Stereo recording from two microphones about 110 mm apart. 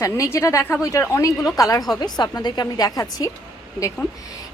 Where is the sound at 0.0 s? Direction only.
25° left (ahead or behind).